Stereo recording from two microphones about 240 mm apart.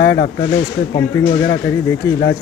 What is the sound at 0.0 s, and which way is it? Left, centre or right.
Speech, left.